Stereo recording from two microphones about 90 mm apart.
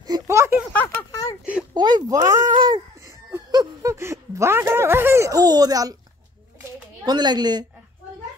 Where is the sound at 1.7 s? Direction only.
55° right (ahead or behind).